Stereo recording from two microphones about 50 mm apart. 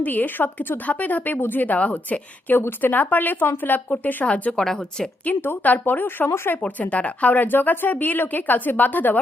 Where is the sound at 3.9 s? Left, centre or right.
Left.